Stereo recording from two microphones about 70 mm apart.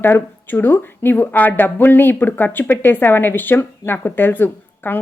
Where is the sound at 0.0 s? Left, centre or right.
Left.